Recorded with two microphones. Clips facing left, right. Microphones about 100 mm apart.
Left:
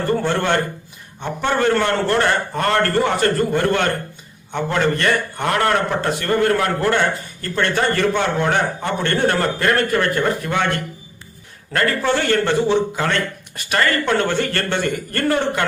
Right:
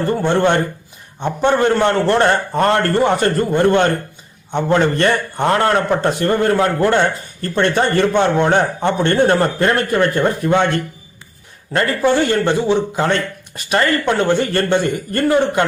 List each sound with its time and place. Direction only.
0.1 s a man's voice: 20° right (ahead or behind)
11.7 s a man's voice: 20° right (ahead or behind)